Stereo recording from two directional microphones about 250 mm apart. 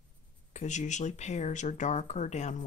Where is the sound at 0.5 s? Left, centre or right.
Left.